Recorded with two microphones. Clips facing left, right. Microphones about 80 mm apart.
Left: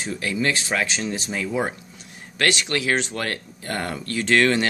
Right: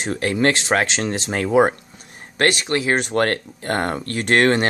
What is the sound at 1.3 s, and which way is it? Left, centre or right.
Speech, right.